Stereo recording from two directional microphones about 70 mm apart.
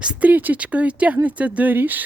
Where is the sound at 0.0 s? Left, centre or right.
Right.